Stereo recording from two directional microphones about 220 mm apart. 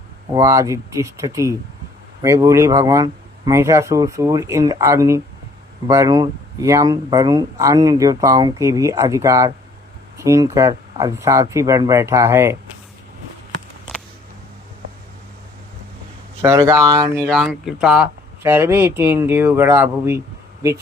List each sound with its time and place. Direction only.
0.3 s speech: 15° right (ahead or behind)
16.4 s speech: 10° right (ahead or behind)
17.2 s speech: 5° left (ahead or behind); by 20.7 s 15° right (ahead or behind)